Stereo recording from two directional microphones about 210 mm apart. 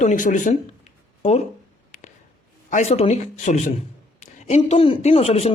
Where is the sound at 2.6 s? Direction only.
35° left (ahead or behind).